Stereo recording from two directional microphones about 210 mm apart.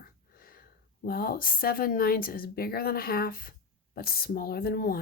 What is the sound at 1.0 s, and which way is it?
Speech, 45° left (ahead or behind).